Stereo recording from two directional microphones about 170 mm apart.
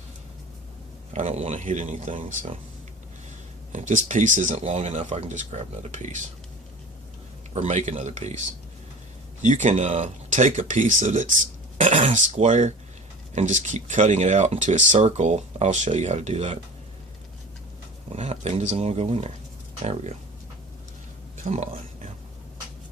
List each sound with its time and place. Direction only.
1.1 s speech: 45° right (ahead or behind)
3.7 s speech: 45° right (ahead or behind)
7.5 s speech: 40° right (ahead or behind)
9.4 s speech: 45° right (ahead or behind)
18.1 s speech: 40° right (ahead or behind)
21.4 s speech: 45° right (ahead or behind)